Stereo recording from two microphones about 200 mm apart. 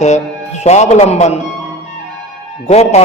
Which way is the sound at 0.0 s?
35° left (ahead or behind).